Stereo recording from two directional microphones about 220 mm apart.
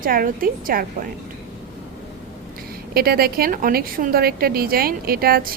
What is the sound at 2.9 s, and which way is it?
A woman's voice, 45° right (ahead or behind).